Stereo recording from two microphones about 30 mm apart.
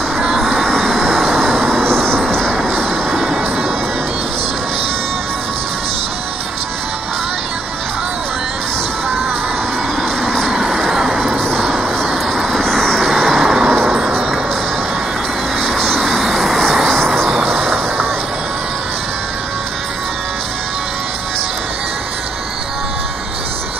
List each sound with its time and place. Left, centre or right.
0.4 s vehicle: centre
1.8 s music: left
3.2 s music: centre
10.7 s music: centre
12.5 s vehicle: centre
13.0 s vehicle: centre
13.3 s music: centre
15.6 s vehicle: centre
16.0 s vehicle: centre
16.9 s music: centre